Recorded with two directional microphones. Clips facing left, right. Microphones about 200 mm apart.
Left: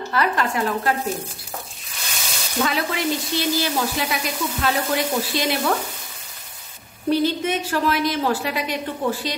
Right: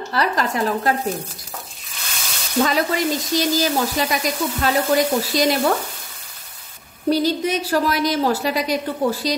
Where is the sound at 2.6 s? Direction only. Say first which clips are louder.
Right 1 dB; 40° right (ahead or behind).